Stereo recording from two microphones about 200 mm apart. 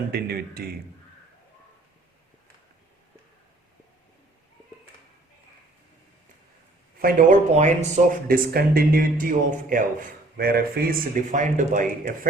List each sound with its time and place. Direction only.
0.1 s speech: 50° right (ahead or behind)
7.0 s speech: 40° right (ahead or behind)